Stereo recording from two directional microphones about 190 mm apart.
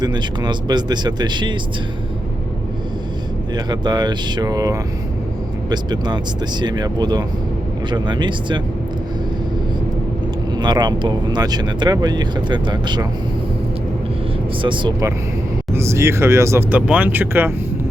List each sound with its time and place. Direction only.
0.0 s speech: 25° right (ahead or behind)
3.5 s speech: 20° right (ahead or behind)
10.6 s speech: 20° right (ahead or behind)
14.6 s speech: 25° right (ahead or behind); by 17.5 s 10° right (ahead or behind)